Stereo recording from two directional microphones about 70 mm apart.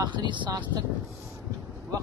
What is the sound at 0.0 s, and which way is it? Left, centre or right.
Speech, right.